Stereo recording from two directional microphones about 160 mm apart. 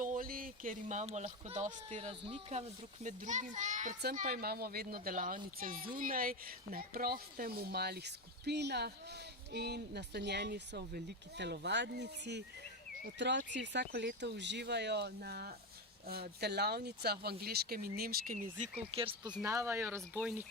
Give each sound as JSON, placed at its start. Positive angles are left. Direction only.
{"t": 0.0, "sound": "a child's voice", "side_deg": -60}
{"t": 4.1, "sound": "speech", "side_deg": -60}
{"t": 18.9, "sound": "speech", "side_deg": -30}
{"t": 19.5, "sound": "speech", "side_deg": -15}